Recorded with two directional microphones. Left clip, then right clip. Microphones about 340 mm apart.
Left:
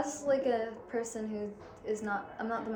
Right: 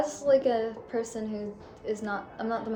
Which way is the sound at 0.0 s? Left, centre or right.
Centre.